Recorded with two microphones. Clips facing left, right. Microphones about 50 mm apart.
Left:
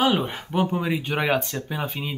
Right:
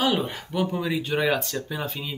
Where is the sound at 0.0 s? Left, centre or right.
Left.